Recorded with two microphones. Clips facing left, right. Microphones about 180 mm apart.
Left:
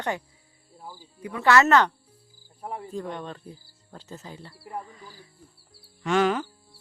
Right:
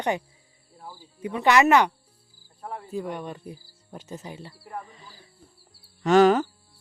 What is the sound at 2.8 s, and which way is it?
Speech, 10° right (ahead or behind).